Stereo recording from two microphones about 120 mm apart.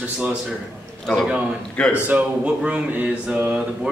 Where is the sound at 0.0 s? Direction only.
10° right (ahead or behind).